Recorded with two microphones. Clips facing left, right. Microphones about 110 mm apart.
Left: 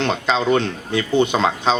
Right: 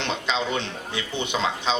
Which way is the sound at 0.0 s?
45° left (ahead or behind).